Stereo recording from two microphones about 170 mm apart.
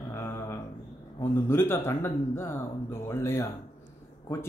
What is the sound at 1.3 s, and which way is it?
Speech, 15° left (ahead or behind).